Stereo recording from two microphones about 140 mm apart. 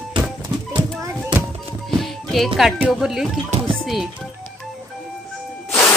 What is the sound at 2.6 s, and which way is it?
Speech, 5° right (ahead or behind).